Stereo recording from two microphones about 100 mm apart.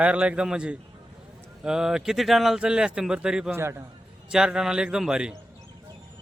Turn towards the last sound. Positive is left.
turn(degrees=-5)  # may be behind; listen again after turning